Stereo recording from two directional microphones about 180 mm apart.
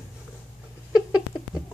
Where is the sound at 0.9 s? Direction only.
5° right (ahead or behind).